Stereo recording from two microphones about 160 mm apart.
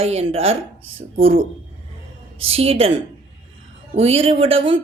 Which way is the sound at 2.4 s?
35° right (ahead or behind).